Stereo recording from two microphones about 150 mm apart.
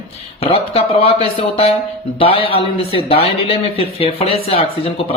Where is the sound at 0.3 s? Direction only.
40° left (ahead or behind).